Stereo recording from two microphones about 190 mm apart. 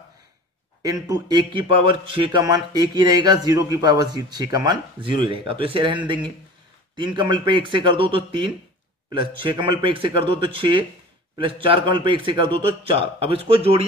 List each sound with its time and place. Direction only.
0.8 s speech: 20° right (ahead or behind)
7.0 s speech: 25° right (ahead or behind)